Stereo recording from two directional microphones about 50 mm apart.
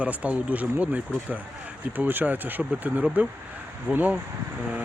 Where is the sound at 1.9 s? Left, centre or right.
Right.